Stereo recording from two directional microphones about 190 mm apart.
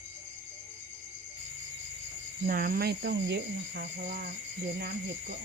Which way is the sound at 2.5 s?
50° right (ahead or behind).